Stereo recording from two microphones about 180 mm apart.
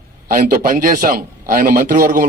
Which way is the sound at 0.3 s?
55° right (ahead or behind).